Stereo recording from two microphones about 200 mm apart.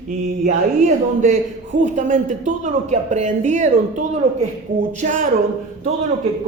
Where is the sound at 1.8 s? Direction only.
40° right (ahead or behind).